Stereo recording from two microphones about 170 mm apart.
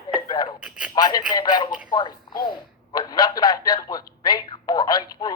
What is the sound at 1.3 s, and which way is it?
Speech, 25° left (ahead or behind).